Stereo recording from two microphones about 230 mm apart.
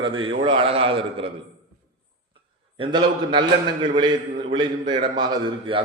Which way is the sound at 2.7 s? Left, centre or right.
Right.